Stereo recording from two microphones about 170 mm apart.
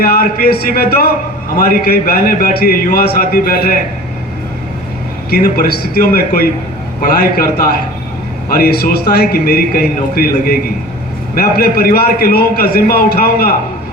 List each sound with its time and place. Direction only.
0.0 s a man's voice: 65° left (ahead or behind)
5.3 s a man's voice: 65° left (ahead or behind)
8.5 s a man's voice: 65° left (ahead or behind)